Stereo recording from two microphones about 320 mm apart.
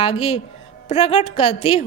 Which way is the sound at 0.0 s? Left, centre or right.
Centre.